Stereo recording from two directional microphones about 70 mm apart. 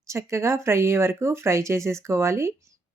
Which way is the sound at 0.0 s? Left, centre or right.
Right.